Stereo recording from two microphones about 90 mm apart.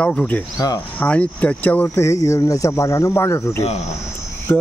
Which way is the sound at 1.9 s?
35° left (ahead or behind).